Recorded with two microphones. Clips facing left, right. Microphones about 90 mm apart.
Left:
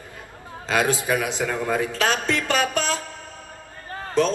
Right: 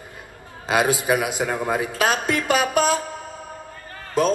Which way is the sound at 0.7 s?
15° right (ahead or behind).